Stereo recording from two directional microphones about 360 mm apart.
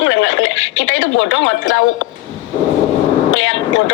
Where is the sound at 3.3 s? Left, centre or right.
Left.